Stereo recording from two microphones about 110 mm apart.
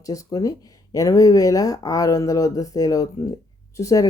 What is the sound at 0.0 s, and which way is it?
Speech, 30° left (ahead or behind).